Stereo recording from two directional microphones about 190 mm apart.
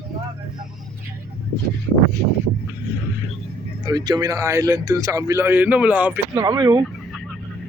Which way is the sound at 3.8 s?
20° right (ahead or behind).